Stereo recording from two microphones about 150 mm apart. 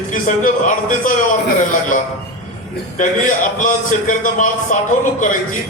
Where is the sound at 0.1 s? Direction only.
60° left (ahead or behind).